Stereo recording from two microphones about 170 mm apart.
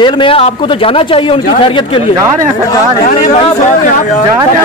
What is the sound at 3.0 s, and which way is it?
Speech, 40° left (ahead or behind).